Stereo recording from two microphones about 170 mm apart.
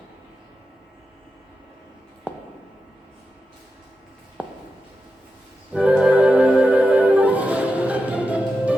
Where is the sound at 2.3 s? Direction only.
5° right (ahead or behind).